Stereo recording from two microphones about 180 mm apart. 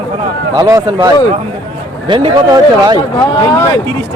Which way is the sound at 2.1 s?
25° right (ahead or behind).